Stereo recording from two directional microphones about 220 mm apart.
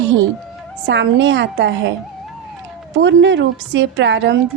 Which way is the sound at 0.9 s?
55° right (ahead or behind).